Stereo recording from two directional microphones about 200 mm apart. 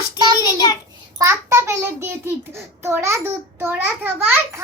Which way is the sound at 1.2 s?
15° right (ahead or behind).